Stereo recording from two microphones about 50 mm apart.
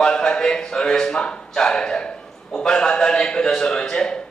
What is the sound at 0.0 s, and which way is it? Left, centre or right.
A man's voice, centre.